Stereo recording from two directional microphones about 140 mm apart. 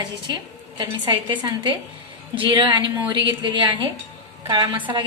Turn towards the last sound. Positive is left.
turn(degrees=-35)  # may be behind; listen again after turning